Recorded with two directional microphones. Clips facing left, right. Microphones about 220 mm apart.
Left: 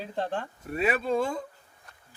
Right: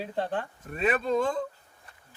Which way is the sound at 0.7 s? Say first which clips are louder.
Even; 10° left (ahead or behind).